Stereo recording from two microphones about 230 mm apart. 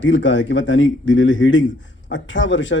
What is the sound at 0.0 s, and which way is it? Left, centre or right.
A man's voice, left.